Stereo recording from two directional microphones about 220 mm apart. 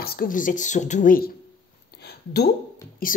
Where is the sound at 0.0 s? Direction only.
45° left (ahead or behind).